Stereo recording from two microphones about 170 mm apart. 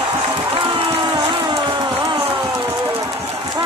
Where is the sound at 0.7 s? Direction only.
30° right (ahead or behind).